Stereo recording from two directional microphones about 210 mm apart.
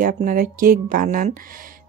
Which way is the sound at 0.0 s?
40° right (ahead or behind).